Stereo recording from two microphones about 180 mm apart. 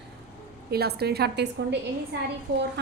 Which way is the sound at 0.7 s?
60° right (ahead or behind).